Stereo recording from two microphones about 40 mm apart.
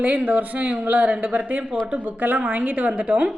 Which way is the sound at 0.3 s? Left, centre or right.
Right.